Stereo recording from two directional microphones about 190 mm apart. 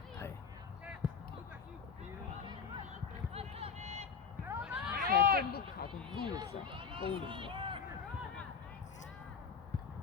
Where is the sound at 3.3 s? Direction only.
30° right (ahead or behind).